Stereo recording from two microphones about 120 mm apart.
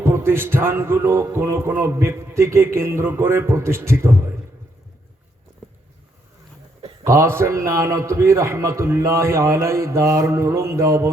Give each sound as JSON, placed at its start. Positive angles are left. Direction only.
{"t": 0.0, "sound": "music", "side_deg": -20}
{"t": 7.0, "sound": "music", "side_deg": -25}